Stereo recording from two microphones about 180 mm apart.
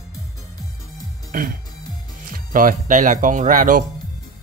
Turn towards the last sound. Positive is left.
turn(degrees=-45)  # may be behind; listen again after turning